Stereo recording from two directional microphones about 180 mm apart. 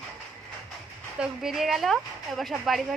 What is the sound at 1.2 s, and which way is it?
Speech, 5° right (ahead or behind).